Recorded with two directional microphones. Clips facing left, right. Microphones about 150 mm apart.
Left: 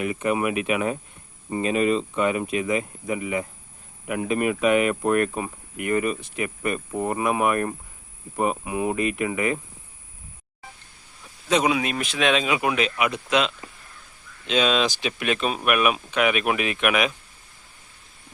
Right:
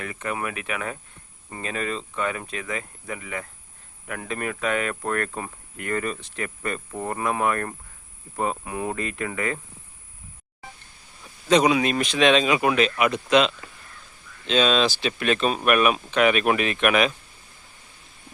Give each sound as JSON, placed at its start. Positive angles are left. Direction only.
{"t": 0.0, "sound": "speech", "side_deg": 15}
{"t": 11.4, "sound": "speech", "side_deg": 5}